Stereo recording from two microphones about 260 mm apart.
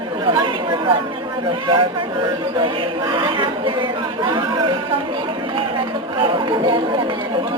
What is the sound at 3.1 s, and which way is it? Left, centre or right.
Speech, centre.